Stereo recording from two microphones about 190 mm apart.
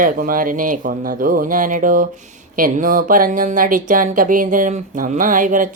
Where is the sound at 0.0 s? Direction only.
45° right (ahead or behind).